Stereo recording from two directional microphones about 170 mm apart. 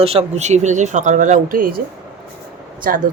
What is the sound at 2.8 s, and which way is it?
Speech, 60° right (ahead or behind).